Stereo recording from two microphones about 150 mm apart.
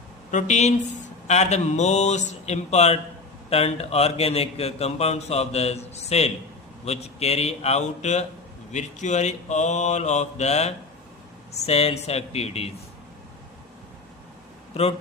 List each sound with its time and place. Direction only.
0.3 s a man's voice: 50° left (ahead or behind)